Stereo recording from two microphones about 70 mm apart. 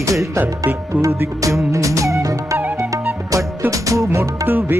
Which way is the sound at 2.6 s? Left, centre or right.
Right.